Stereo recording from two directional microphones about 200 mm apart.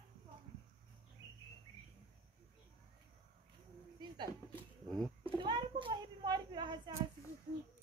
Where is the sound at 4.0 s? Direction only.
25° right (ahead or behind).